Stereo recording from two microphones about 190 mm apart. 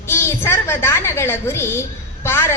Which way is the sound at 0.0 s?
15° left (ahead or behind).